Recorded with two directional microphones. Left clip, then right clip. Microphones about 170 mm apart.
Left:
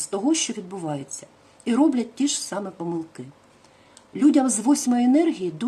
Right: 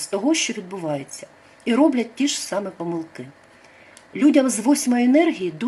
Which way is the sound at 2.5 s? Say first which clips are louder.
Right 4 dB; 15° left (ahead or behind).